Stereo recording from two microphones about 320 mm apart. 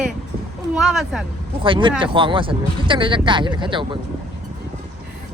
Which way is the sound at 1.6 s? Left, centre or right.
Centre.